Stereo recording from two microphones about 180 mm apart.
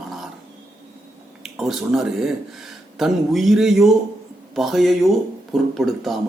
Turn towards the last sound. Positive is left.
turn(degrees=0)  # may be behind; listen again after turning